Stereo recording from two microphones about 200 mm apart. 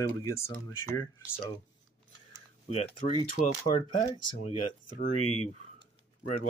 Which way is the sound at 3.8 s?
30° left (ahead or behind).